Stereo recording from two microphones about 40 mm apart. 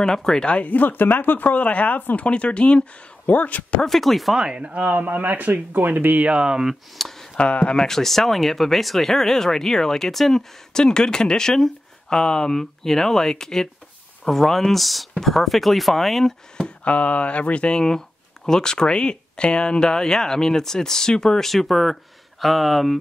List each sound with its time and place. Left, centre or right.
0.0 s speech: centre
0.5 s speech: left
2.2 s speech: left
3.3 s speech: left
3.8 s speech: centre
4.4 s speech: right
4.7 s speech: right
6.2 s speech: right
6.7 s speech: centre
7.3 s speech: left
7.7 s speech: centre
16.8 s speech: left
17.7 s speech: centre